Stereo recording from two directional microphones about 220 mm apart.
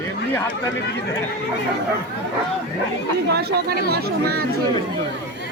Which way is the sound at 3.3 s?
45° right (ahead or behind).